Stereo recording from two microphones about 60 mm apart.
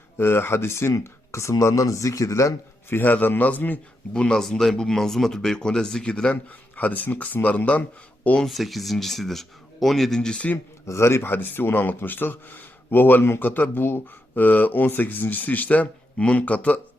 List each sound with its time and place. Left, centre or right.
0.2 s speech: left
2.9 s a man's voice: left
4.1 s speech: centre
6.3 s speech: left
8.4 s speech: centre
10.8 s a man's voice: left